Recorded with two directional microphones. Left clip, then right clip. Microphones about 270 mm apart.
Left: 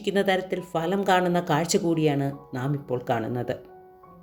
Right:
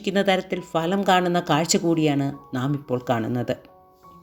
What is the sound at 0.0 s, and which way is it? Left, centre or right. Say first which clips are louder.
Speech: right 2 dB; centre.